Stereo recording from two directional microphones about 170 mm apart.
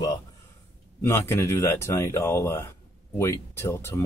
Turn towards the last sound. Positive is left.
turn(degrees=15)  # may be behind; listen again after turning